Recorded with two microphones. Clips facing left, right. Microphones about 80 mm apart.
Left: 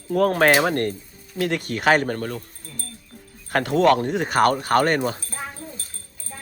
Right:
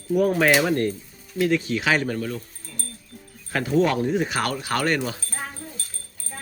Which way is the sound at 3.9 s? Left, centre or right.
Left.